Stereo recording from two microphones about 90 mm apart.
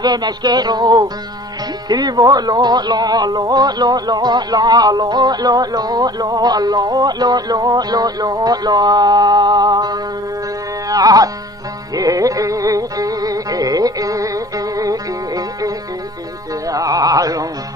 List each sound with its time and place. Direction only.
0.0 s speech: 50° right (ahead or behind)
10.9 s music: 45° right (ahead or behind)
16.6 s carnatic music: 40° right (ahead or behind)